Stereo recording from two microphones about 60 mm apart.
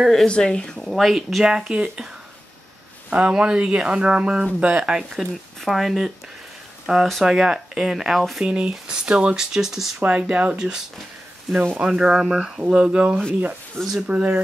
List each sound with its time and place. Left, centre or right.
0.0 s speech: centre
0.3 s speech: centre
0.9 s speech: centre
3.1 s speech: centre
5.1 s speech: centre
6.9 s speech: centre
8.5 s speech: centre
9.9 s speech: centre